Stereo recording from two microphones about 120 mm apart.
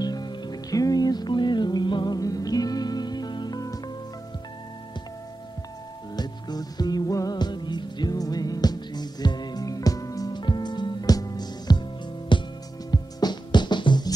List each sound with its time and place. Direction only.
0.0 s music: 35° left (ahead or behind)
6.1 s music: 35° left (ahead or behind)